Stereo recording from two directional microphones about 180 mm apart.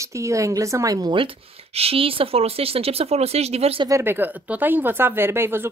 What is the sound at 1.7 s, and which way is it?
Speech, 35° right (ahead or behind).